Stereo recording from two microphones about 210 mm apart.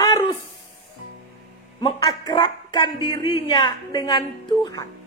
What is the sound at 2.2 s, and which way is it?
A woman's voice, 20° left (ahead or behind).